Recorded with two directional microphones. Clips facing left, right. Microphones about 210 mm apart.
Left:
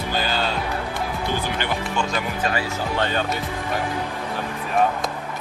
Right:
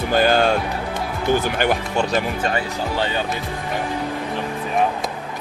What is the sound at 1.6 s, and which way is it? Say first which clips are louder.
Speech: right 5 dB; 45° right (ahead or behind).